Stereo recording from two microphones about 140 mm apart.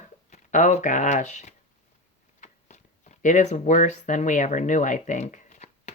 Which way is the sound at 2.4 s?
60° left (ahead or behind).